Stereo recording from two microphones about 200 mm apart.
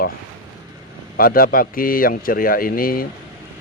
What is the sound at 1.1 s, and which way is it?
A man's voice, 45° left (ahead or behind).